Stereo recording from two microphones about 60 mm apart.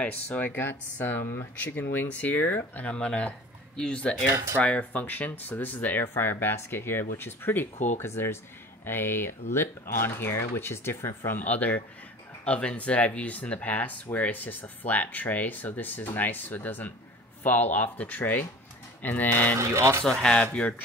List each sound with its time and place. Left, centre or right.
0.0 s speech: left
4.3 s speech: right
4.6 s speech: left
11.4 s speech: left
19.6 s speech: right
20.0 s speech: centre